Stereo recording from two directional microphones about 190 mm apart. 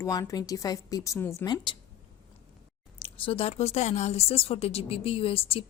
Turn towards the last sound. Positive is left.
turn(degrees=30)  # may be behind; listen again after turning